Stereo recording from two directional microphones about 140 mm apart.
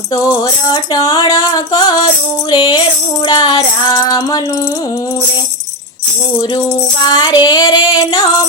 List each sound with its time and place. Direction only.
0.3 s music: 30° left (ahead or behind)
7.0 s music: 30° left (ahead or behind)